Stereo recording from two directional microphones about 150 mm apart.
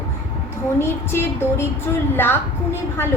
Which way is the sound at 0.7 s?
15° left (ahead or behind).